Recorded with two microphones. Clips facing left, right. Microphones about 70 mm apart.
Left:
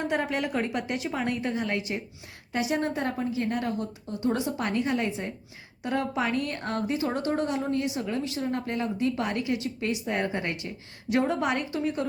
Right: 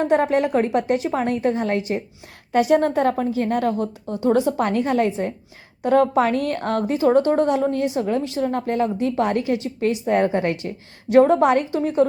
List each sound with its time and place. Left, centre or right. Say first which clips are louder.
0.1 s a woman's voice: right 10 dB; right
2.5 s a woman's voice: right 11 dB; right
4.3 s a woman's voice: right 9 dB; right
6.8 s a woman's voice: right 12 dB; right